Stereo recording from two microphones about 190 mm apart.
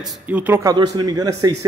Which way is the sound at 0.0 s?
5° right (ahead or behind).